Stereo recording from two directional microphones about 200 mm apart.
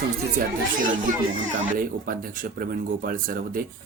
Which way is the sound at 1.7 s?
45° right (ahead or behind).